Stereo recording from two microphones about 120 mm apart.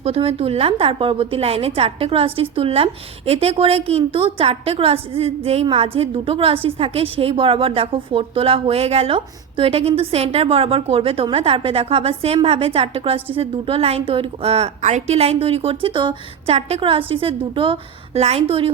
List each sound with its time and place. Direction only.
0.0 s a woman's voice: 55° right (ahead or behind)
16.6 s a woman's voice: 60° right (ahead or behind)